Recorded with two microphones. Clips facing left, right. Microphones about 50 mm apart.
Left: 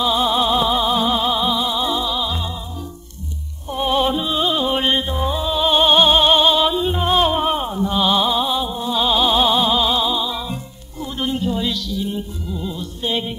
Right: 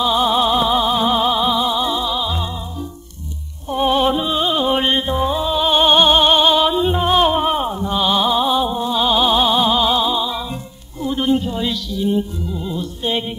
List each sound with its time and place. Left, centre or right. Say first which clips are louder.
0.0 s music: right 2 dB; centre
3.7 s music: right 3 dB; centre